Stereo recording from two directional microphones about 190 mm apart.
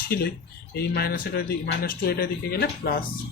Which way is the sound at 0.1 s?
55° left (ahead or behind).